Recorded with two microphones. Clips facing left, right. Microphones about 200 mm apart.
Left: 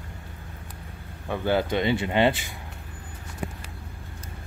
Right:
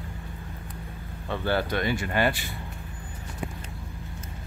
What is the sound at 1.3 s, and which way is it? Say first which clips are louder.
Speech: left 3 dB; 15° left (ahead or behind).